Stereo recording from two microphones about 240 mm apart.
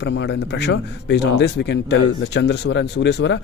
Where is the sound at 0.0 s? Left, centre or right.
Left.